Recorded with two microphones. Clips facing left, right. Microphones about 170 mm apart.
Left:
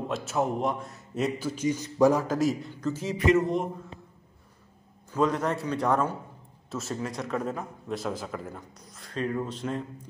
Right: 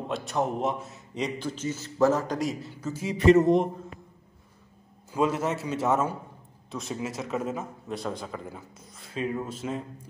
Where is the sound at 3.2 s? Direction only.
30° right (ahead or behind).